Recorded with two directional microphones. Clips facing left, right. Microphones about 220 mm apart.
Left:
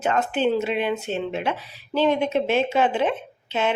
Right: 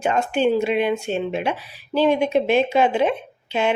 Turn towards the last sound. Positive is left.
turn(degrees=-15)  # may be behind; listen again after turning